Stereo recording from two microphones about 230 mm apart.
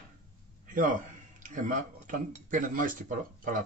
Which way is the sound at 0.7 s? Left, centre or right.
Right.